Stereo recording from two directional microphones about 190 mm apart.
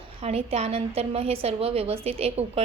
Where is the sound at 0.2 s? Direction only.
30° right (ahead or behind).